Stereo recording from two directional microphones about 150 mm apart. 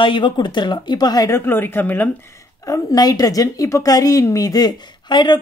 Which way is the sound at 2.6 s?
25° left (ahead or behind).